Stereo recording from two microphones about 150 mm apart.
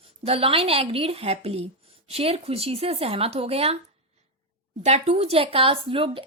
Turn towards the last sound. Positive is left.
turn(degrees=-35)  # may be behind; listen again after turning